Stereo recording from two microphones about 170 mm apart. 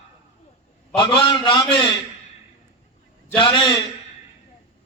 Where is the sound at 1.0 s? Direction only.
30° left (ahead or behind).